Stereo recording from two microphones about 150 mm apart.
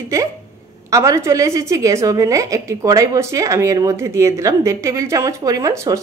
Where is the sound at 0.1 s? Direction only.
20° right (ahead or behind).